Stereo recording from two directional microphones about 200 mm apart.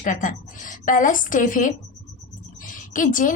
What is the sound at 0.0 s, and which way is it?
A woman's voice, 40° left (ahead or behind).